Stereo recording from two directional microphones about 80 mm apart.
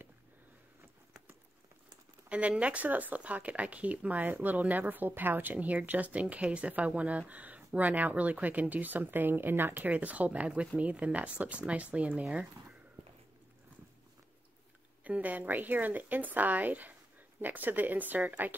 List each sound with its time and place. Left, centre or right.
2.2 s speech: centre
15.0 s speech: centre